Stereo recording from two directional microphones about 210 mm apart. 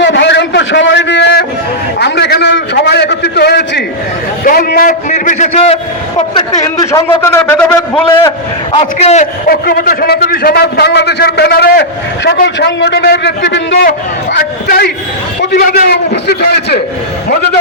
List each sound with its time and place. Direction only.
0.0 s a sound: 55° left (ahead or behind)
4.4 s a man's voice: 45° left (ahead or behind)
6.7 s a man's voice: 15° left (ahead or behind)
8.7 s a man's voice: 30° left (ahead or behind)
9.5 s a man's voice: 45° left (ahead or behind)